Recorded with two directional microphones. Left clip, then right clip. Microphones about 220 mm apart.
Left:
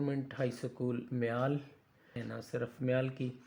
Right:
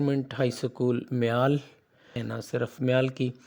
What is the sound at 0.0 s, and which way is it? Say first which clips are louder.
Speech: right 9 dB; 45° right (ahead or behind).